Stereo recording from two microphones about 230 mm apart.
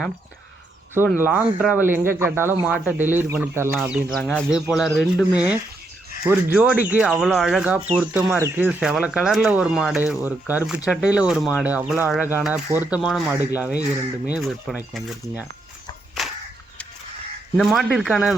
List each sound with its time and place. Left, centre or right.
1.2 s speech: centre
17.6 s speech: centre